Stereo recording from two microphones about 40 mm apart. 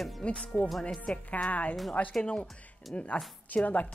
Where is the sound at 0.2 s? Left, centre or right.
Left.